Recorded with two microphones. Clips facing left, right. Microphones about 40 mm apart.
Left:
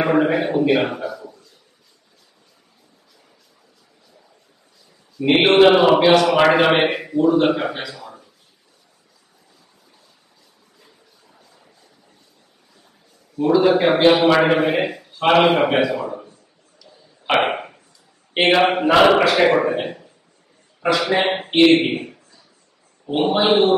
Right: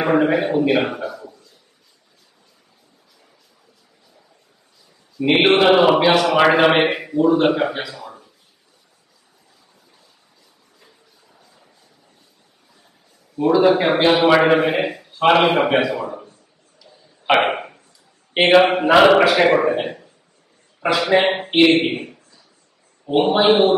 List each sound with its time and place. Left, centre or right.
0.0 s a man's voice: centre
5.2 s a man's voice: centre
13.4 s a man's voice: centre
17.5 s a sound: centre
18.3 s a man's voice: centre
23.0 s a man's voice: centre